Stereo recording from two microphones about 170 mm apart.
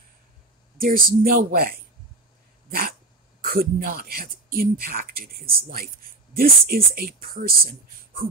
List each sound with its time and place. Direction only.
0.7 s speech: 55° right (ahead or behind)
3.3 s speech: 60° right (ahead or behind)